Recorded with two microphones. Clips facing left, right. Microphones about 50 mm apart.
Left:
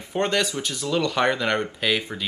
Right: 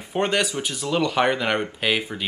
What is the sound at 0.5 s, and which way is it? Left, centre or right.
Speech, right.